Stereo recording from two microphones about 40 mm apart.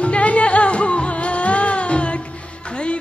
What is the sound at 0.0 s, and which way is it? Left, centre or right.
Music, left.